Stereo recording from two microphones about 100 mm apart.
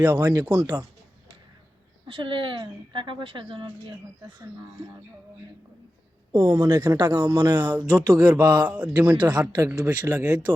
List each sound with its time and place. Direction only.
0.0 s speech: 20° right (ahead or behind)
2.0 s speech: 55° right (ahead or behind)
6.3 s speech: 35° right (ahead or behind); by 8.4 s 15° right (ahead or behind)
8.4 s speech: 45° right (ahead or behind)
8.6 s speech: 15° right (ahead or behind)
9.1 s speech: 45° right (ahead or behind)
9.6 s speech: 25° right (ahead or behind)